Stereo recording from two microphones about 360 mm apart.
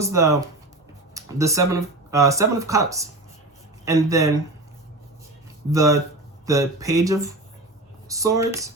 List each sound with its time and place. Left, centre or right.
0.0 s speech: centre
5.7 s speech: centre